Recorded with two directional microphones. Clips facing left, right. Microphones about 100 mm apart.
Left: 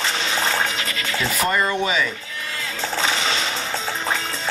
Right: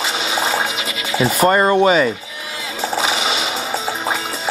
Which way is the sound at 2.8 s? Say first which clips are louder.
Right 4 dB; 10° right (ahead or behind).